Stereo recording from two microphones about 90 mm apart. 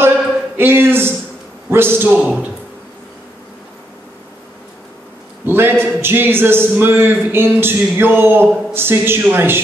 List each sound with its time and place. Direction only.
0.6 s a man's voice: 25° right (ahead or behind)
5.4 s a man's voice: 25° right (ahead or behind)